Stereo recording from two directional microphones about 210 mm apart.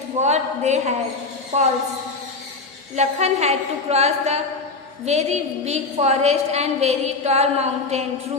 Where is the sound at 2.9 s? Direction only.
30° right (ahead or behind).